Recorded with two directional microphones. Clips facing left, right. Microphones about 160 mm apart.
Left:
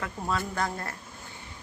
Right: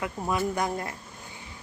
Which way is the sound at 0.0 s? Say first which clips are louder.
Right 3 dB; 15° right (ahead or behind).